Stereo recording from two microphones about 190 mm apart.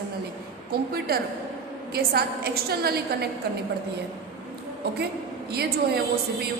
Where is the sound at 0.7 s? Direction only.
55° right (ahead or behind).